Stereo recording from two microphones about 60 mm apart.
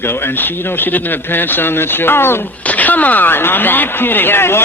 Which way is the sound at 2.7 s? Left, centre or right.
Left.